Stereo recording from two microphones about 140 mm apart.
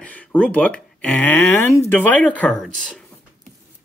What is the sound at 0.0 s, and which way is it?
Speech, 10° left (ahead or behind).